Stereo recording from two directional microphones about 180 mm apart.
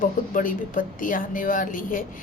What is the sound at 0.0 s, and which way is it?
Speech, 50° left (ahead or behind).